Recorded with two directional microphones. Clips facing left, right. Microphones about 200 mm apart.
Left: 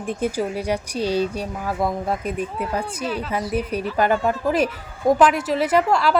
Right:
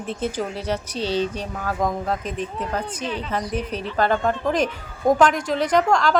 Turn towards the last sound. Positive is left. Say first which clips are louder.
# even
turn(degrees=5)  # may be behind; listen again after turning